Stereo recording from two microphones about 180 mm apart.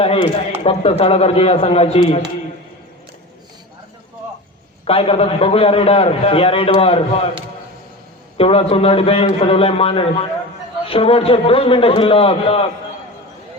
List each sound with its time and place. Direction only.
0.6 s a man's voice: 30° left (ahead or behind)
4.9 s a man's voice: 35° left (ahead or behind)
8.4 s a man's voice: 30° left (ahead or behind)